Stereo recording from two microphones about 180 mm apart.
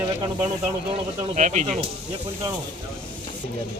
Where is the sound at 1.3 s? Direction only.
40° right (ahead or behind).